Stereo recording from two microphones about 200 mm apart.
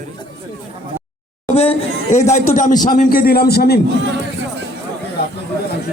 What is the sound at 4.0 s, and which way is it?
Music, 65° right (ahead or behind).